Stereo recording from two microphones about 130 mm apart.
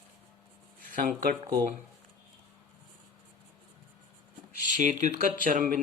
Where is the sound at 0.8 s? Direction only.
90° right.